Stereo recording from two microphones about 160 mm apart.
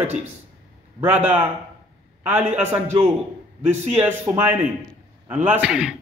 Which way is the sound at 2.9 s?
45° right (ahead or behind).